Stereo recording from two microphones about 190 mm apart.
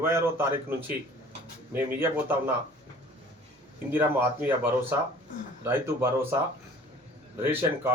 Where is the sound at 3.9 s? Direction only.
10° right (ahead or behind).